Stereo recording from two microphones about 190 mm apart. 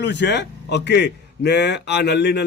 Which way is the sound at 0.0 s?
65° left (ahead or behind).